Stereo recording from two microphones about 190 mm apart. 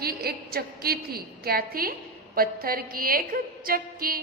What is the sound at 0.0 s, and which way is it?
A woman's voice, 55° right (ahead or behind).